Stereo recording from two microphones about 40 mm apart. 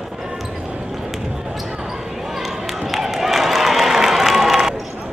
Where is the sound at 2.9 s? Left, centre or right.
Centre.